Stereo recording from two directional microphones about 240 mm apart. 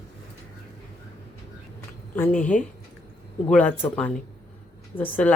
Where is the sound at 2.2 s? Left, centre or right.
Centre.